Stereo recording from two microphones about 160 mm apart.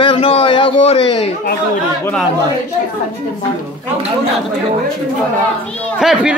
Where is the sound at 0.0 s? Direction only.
35° left (ahead or behind).